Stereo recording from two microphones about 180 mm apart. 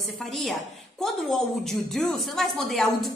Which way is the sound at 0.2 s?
Centre (ahead or behind).